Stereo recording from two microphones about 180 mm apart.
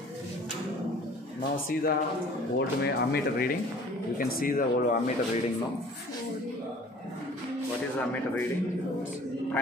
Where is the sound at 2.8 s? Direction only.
60° left (ahead or behind).